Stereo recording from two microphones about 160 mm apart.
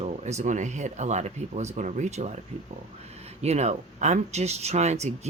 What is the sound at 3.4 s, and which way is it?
Speech, 45° right (ahead or behind).